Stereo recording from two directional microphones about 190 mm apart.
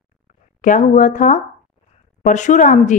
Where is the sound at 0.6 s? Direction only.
40° left (ahead or behind).